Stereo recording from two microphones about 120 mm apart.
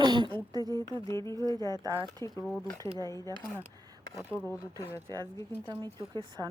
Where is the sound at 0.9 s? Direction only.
25° left (ahead or behind).